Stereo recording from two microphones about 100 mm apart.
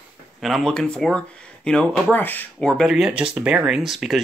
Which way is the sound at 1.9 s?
20° left (ahead or behind).